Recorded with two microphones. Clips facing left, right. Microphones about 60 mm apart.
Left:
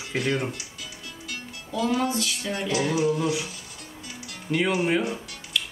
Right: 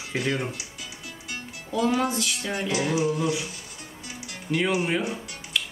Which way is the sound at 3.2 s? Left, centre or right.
Centre.